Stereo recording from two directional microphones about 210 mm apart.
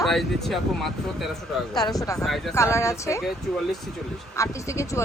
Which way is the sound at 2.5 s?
15° left (ahead or behind).